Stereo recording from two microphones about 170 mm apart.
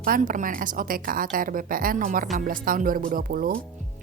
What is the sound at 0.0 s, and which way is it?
A woman's voice, 55° right (ahead or behind).